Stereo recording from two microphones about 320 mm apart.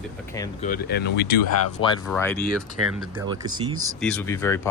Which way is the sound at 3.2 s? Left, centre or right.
Centre.